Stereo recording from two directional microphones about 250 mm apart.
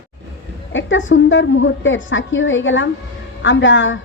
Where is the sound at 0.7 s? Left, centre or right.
Left.